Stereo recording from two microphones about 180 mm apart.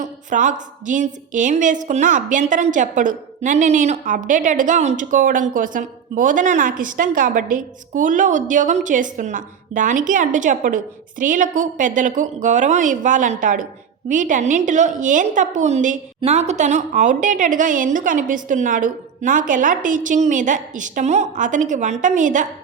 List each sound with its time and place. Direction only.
0.0 s a woman's voice: 45° right (ahead or behind)